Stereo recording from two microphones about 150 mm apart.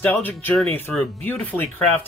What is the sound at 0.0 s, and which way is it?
Speech, 10° left (ahead or behind).